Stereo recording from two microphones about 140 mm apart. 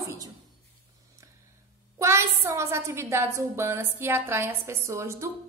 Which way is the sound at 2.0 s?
20° right (ahead or behind).